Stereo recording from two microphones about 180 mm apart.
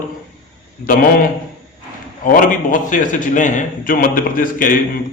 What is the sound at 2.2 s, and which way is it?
A man's voice, 50° left (ahead or behind).